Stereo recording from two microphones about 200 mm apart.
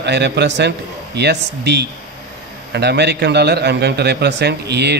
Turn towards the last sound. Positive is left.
turn(degrees=-55)  # may be behind; listen again after turning